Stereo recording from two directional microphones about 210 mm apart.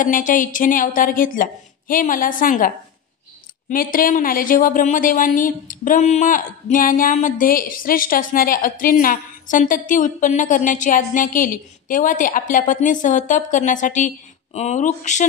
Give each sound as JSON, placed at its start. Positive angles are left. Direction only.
{"t": 0.0, "sound": "speech", "side_deg": 40}